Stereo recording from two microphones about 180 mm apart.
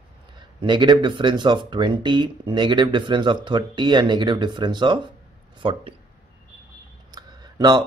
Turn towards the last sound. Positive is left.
turn(degrees=-25)  # may be behind; listen again after turning